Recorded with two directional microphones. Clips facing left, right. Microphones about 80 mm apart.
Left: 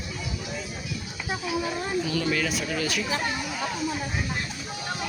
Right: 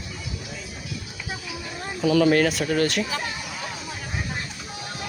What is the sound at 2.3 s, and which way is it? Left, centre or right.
Speech, right.